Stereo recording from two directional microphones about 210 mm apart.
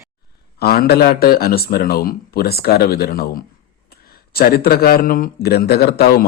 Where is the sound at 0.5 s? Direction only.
45° left (ahead or behind).